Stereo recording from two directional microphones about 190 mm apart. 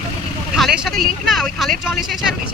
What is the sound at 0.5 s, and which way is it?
Speech, centre (ahead or behind).